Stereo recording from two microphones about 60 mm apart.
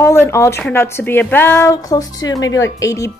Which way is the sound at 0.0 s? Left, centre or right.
Left.